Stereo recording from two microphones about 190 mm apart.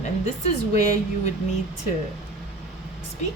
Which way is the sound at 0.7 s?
35° left (ahead or behind).